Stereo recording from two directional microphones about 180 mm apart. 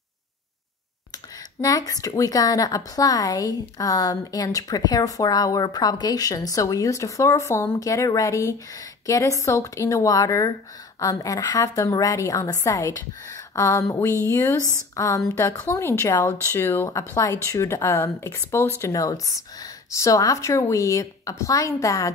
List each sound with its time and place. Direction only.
1.6 s a woman's voice: 20° left (ahead or behind)